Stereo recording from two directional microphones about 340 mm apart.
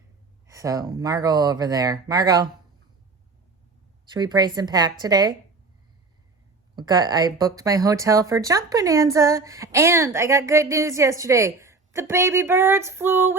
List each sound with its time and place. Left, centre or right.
0.4 s speech: centre
4.0 s speech: centre
6.7 s speech: centre